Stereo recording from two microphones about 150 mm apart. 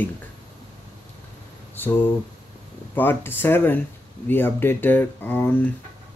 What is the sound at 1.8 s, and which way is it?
Speech, 15° left (ahead or behind).